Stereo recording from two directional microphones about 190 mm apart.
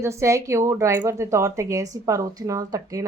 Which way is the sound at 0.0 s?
15° right (ahead or behind).